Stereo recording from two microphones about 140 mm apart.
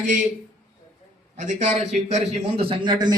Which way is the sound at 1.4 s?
60° right (ahead or behind).